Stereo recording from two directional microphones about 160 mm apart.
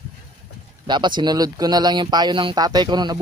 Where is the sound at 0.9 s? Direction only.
30° right (ahead or behind).